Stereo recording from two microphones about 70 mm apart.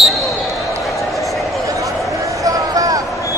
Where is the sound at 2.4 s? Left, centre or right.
Right.